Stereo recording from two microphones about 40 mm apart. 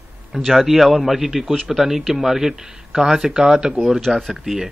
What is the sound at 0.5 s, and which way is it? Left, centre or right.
Speech, centre.